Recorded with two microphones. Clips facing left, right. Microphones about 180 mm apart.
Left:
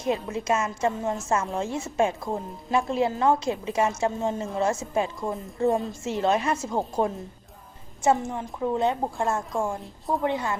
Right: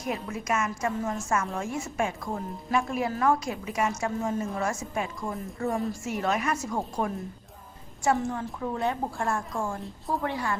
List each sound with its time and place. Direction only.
0.0 s a woman's voice: 25° left (ahead or behind)